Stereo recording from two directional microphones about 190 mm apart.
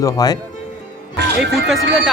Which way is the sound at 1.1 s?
60° right (ahead or behind).